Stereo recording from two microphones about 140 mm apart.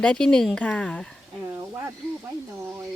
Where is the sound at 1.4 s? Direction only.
20° right (ahead or behind).